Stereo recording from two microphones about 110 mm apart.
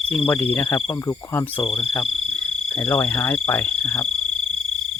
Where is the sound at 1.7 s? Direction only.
55° left (ahead or behind).